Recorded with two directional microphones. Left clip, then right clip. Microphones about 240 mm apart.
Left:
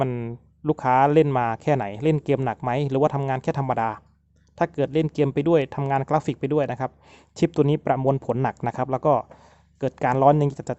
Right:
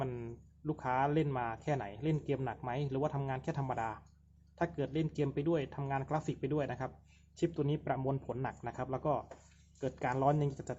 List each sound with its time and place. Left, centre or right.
0.0 s speech: left